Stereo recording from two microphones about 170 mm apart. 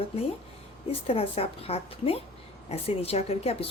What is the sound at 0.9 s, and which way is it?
A woman's voice, 35° left (ahead or behind).